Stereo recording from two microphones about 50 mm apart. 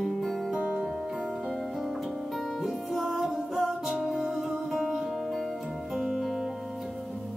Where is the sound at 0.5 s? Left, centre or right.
Centre.